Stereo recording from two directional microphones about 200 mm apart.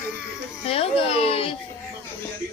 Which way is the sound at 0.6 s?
30° left (ahead or behind).